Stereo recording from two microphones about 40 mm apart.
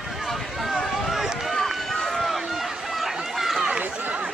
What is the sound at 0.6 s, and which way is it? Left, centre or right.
Run, centre.